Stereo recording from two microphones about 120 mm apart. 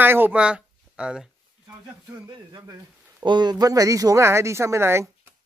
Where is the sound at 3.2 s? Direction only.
35° right (ahead or behind); by 5.1 s 20° right (ahead or behind).